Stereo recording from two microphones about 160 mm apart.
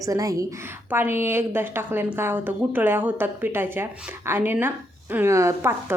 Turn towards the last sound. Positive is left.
turn(degrees=-15)  # may be behind; listen again after turning